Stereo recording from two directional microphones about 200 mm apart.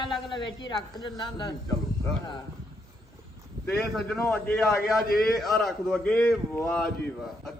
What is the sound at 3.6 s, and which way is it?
A man's voice, centre (ahead or behind).